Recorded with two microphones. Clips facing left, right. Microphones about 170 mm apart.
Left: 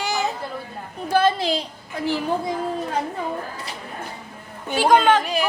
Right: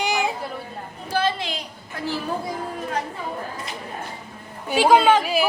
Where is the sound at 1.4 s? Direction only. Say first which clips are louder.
Left 7 dB; 35° left (ahead or behind).